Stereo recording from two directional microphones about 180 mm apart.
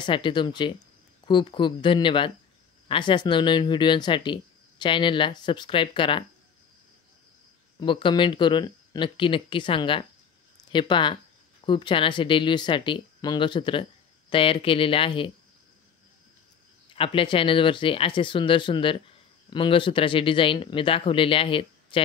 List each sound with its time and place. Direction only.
0.0 s speech: 25° left (ahead or behind)
7.8 s speech: 25° left (ahead or behind)
16.9 s speech: 30° left (ahead or behind)